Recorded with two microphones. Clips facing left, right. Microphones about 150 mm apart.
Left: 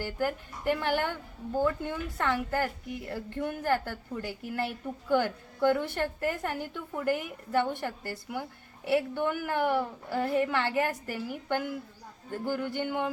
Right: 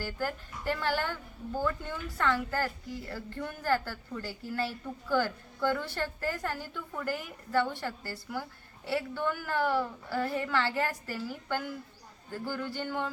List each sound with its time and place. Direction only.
0.0 s a woman's voice: 20° left (ahead or behind)